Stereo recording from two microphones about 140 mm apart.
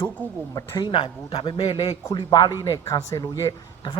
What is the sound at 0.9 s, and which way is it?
Speech, 40° left (ahead or behind).